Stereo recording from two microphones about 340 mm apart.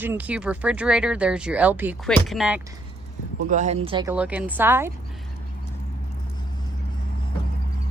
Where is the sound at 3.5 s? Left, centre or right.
Right.